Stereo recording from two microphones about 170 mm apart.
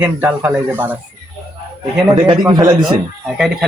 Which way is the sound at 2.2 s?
25° right (ahead or behind).